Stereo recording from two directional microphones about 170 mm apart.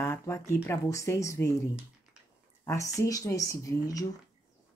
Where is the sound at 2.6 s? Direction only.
20° left (ahead or behind).